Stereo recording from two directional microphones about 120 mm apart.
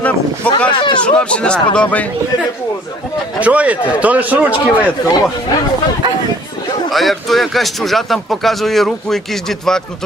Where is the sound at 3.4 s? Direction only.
10° right (ahead or behind).